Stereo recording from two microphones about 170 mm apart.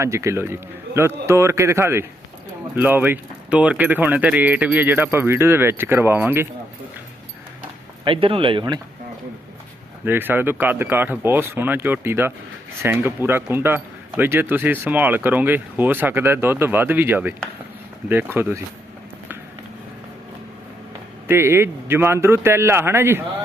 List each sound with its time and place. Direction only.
0.0 s speech: 15° right (ahead or behind)
8.0 s speech: 30° right (ahead or behind)
10.1 s speech: 10° right (ahead or behind)
21.2 s speech: 15° right (ahead or behind)